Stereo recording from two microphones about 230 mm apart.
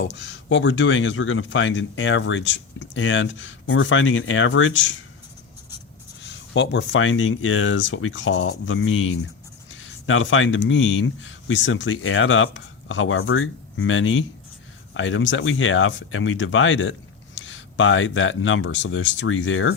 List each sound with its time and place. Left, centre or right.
0.0 s speech: left
6.2 s speech: left
9.7 s a sound: left
10.7 s speech: left